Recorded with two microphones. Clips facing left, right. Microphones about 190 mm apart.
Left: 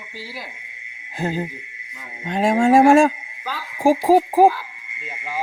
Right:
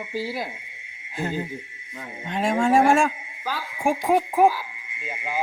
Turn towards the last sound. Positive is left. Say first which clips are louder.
# left 5 dB
turn(degrees=30)  # may be behind; listen again after turning